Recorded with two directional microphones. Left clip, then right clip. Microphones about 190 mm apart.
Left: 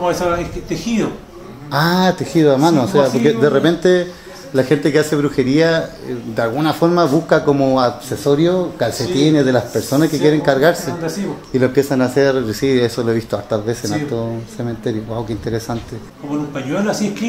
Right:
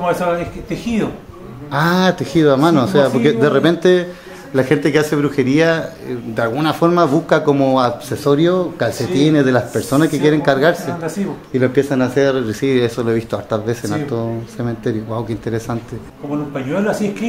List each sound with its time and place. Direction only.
0.0 s a man's voice: 50° right (ahead or behind)
1.7 s a man's voice: 5° left (ahead or behind)
11.5 s speech: 10° left (ahead or behind)
13.7 s a man's voice: 10° right (ahead or behind)
16.8 s a man's voice: 50° right (ahead or behind)